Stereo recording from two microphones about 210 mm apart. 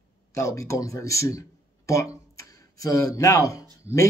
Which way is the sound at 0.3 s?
15° left (ahead or behind).